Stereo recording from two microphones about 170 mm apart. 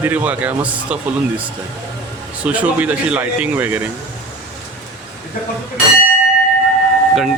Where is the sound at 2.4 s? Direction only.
10° right (ahead or behind).